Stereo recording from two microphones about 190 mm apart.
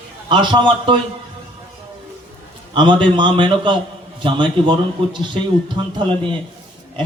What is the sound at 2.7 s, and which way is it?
A man's voice, 25° right (ahead or behind).